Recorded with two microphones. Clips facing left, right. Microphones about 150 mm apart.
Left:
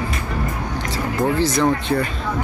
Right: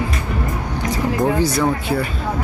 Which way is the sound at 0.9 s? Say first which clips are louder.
Right 3 dB; 15° right (ahead or behind).